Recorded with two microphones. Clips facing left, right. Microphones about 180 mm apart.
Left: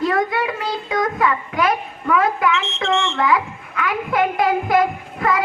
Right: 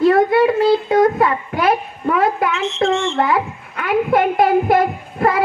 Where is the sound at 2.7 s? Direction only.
30° right (ahead or behind).